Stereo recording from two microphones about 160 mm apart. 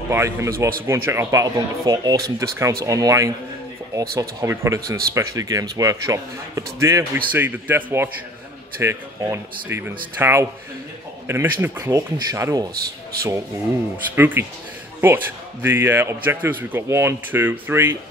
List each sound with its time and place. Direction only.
0.1 s a man's voice: 15° right (ahead or behind)
14.1 s a man's voice: 10° right (ahead or behind)